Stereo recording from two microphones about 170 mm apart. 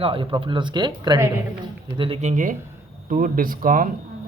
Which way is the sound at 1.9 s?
30° right (ahead or behind).